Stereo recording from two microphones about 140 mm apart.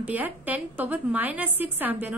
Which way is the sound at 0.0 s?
10° right (ahead or behind).